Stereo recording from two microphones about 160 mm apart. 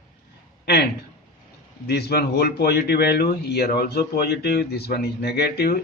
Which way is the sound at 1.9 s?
90° left.